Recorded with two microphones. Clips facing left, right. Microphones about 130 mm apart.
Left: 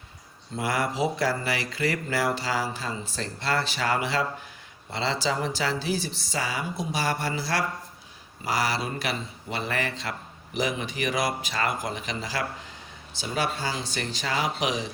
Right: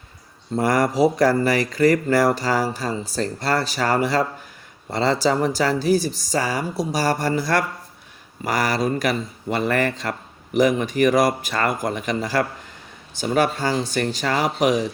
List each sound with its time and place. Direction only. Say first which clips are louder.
0.5 s a man's voice: right 8 dB; 45° right (ahead or behind)